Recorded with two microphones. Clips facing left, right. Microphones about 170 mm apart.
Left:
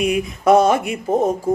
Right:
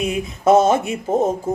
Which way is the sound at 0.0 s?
25° right (ahead or behind).